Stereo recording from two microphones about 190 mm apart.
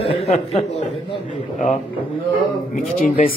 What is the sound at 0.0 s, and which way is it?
Speech, 30° left (ahead or behind).